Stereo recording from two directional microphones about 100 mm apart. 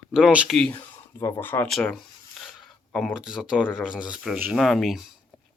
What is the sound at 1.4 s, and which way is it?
Speech, 20° left (ahead or behind).